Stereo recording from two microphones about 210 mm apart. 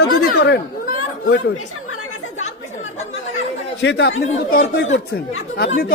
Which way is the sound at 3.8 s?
55° left (ahead or behind).